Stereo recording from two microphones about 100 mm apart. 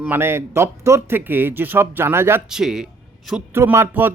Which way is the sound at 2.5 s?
5° right (ahead or behind).